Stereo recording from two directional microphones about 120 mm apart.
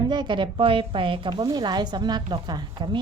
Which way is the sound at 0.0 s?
40° right (ahead or behind).